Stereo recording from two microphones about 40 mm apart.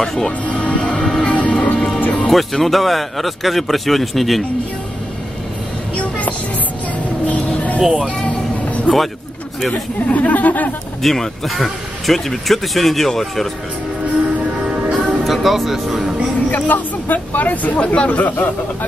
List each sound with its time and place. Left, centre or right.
0.0 s speech: centre
0.5 s music: left
0.9 s music: centre
1.2 s music: left
2.2 s speech: centre
5.9 s a sound: left
7.2 s music: left
8.9 s speech: left
10.0 s speech: left
11.0 s speech: centre
14.7 s music: centre
15.2 s speech: centre
16.4 s speech: left
17.7 s speech: left